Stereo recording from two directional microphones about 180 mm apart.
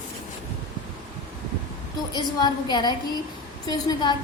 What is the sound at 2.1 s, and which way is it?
A woman's voice, 25° left (ahead or behind).